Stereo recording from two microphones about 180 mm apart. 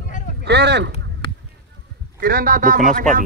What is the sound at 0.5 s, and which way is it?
Speech, 70° right (ahead or behind).